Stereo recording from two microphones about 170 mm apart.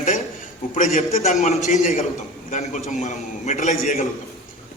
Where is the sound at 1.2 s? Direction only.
45° left (ahead or behind).